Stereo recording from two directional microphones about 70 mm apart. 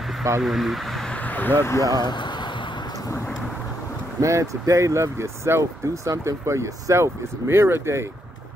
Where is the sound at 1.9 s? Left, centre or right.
Left.